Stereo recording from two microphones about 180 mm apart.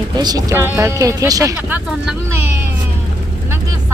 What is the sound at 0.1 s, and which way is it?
Speech, 20° right (ahead or behind).